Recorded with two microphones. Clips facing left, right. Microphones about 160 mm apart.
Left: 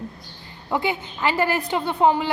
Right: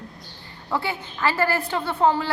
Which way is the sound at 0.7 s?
20° left (ahead or behind).